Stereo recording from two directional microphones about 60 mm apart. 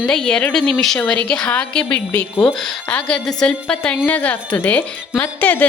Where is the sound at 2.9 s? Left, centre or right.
Left.